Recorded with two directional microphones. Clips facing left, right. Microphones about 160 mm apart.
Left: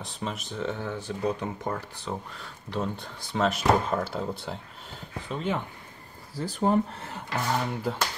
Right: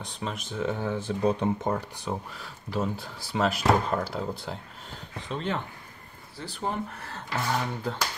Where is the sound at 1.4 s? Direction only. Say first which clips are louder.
Right 5 dB; 20° right (ahead or behind); by 5.6 s 5° left (ahead or behind).